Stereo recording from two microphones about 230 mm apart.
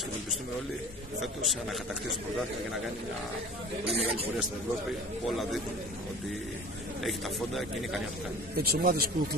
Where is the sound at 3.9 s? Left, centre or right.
Right.